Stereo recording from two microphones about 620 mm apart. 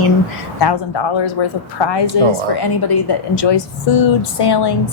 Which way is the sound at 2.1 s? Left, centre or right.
Left.